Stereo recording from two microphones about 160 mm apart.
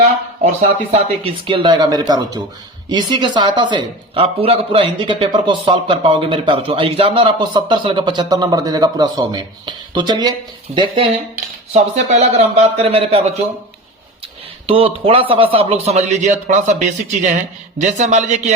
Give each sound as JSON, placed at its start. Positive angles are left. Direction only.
{"t": 0.9, "sound": "speech", "side_deg": -35}
{"t": 10.7, "sound": "a man's voice", "side_deg": -45}
{"t": 14.7, "sound": "a man's voice", "side_deg": -35}